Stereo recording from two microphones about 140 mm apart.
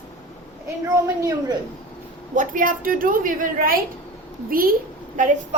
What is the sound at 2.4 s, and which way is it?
A woman's voice, 75° right (ahead or behind).